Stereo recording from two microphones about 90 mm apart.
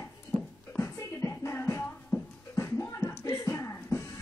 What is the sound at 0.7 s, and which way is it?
Music, 30° left (ahead or behind).